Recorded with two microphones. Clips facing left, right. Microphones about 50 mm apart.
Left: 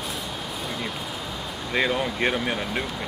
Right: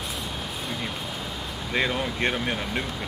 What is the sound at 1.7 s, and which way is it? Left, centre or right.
Speech, centre.